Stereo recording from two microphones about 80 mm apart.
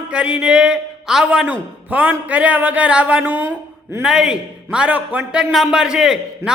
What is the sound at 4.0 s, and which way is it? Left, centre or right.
A man's voice, centre.